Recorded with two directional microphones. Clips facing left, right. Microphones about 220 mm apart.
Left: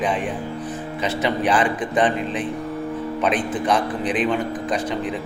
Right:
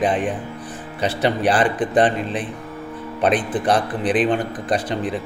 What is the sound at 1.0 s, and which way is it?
A man's voice, 35° right (ahead or behind).